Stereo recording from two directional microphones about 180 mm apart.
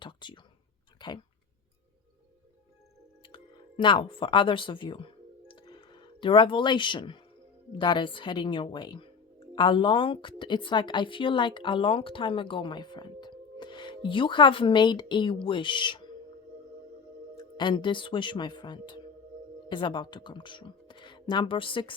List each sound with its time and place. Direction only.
0.0 s speech: 25° left (ahead or behind)
0.9 s tick-tock: 25° left (ahead or behind)
3.2 s a sound: 25° left (ahead or behind)
7.8 s a woman's voice: 25° left (ahead or behind)
17.3 s speech: 25° left (ahead or behind)